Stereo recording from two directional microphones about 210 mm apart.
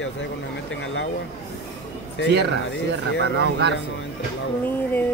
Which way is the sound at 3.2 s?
55° right (ahead or behind).